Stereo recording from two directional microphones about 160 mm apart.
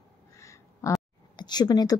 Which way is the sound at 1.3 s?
25° left (ahead or behind).